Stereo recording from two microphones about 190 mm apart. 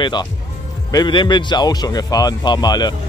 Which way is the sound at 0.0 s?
25° left (ahead or behind).